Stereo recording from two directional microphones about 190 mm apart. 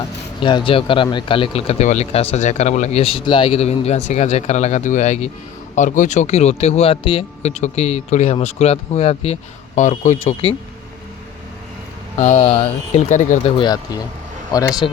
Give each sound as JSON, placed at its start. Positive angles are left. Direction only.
{"t": 0.4, "sound": "speech", "side_deg": 25}
{"t": 12.1, "sound": "speech", "side_deg": 35}
{"t": 13.4, "sound": "speech", "side_deg": 25}